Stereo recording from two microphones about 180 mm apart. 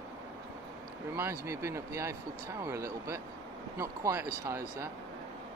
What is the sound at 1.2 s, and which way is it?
Speech, 15° right (ahead or behind).